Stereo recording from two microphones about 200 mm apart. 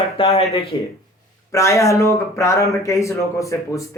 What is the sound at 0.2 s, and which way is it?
Speech, 30° left (ahead or behind).